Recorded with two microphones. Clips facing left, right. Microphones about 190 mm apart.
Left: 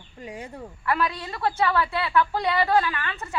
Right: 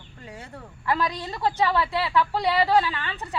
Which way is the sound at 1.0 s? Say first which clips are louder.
Even; 15° right (ahead or behind).